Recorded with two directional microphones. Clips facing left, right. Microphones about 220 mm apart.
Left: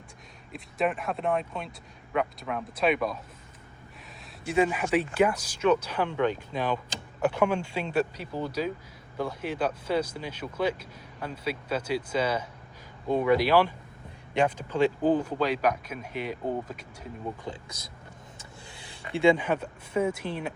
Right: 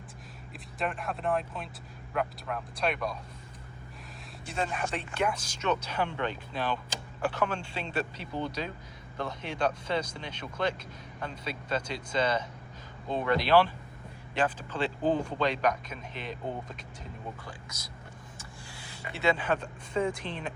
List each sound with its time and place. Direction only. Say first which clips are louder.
0.5 s speech: left 6 dB; centre (ahead or behind)
4.4 s speech: left 8 dB; 5° left (ahead or behind)
17.4 s speech: left 7 dB; 20° left (ahead or behind)
18.3 s a sound: even; 20° left (ahead or behind)
19.3 s speech: even; 10° left (ahead or behind)